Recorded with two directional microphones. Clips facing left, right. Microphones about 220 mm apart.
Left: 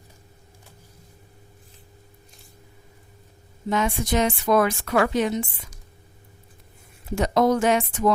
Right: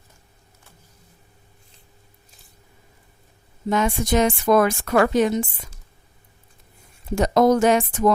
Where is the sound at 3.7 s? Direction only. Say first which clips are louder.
Right 3 dB; 45° right (ahead or behind).